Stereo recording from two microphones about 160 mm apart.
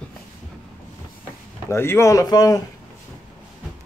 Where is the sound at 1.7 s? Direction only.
15° left (ahead or behind).